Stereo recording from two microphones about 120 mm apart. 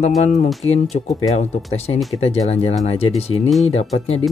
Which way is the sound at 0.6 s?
65° left (ahead or behind).